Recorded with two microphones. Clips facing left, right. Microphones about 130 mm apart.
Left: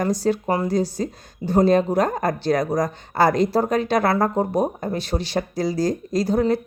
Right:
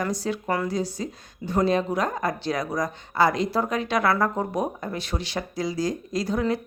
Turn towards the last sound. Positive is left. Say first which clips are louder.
# left 5 dB
turn(degrees=35)  # may be behind; listen again after turning